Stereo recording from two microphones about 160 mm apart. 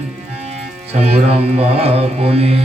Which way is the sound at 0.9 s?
40° right (ahead or behind).